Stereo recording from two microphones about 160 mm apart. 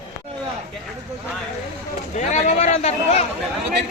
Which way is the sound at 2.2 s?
45° left (ahead or behind).